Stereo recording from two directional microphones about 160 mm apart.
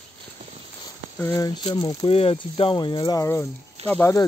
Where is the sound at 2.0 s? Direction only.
35° left (ahead or behind); by 4.3 s 15° left (ahead or behind).